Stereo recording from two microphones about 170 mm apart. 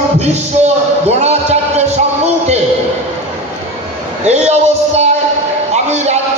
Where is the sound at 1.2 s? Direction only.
40° right (ahead or behind).